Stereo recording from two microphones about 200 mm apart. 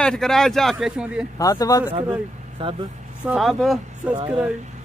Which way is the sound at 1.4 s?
15° left (ahead or behind).